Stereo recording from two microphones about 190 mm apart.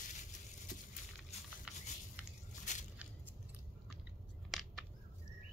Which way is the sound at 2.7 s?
40° left (ahead or behind).